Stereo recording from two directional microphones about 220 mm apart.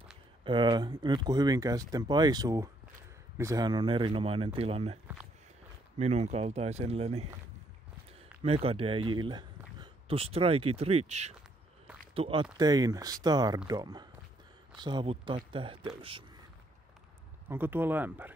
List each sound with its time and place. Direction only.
0.4 s speech: 20° right (ahead or behind)
5.9 s speech: 30° right (ahead or behind)
8.6 s speech: 25° right (ahead or behind)
17.5 s speech: 10° right (ahead or behind)